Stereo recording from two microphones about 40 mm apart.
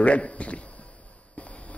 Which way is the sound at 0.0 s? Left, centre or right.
Left.